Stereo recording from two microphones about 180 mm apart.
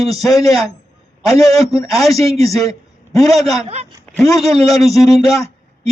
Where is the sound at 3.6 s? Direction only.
35° right (ahead or behind).